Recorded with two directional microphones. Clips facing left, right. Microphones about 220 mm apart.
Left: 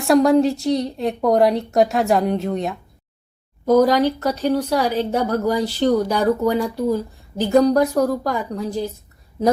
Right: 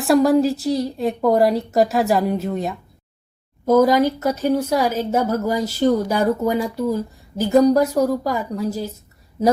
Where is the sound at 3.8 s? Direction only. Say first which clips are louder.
Right 1 dB; 10° right (ahead or behind).